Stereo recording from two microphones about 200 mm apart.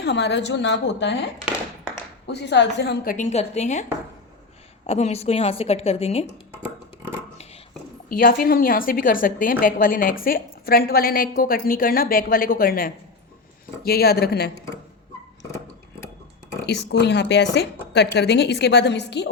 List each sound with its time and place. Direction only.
0.0 s a woman's voice: 60° left (ahead or behind)
2.2 s a woman's voice: 60° left (ahead or behind); by 3.8 s 35° left (ahead or behind)
4.9 s a woman's voice: 30° left (ahead or behind)
6.5 s a sound: 10° right (ahead or behind)
8.1 s a woman's voice: 45° left (ahead or behind)
16.6 s a woman's voice: 55° left (ahead or behind)